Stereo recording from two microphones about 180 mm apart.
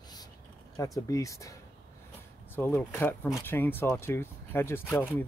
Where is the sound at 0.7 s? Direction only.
20° left (ahead or behind).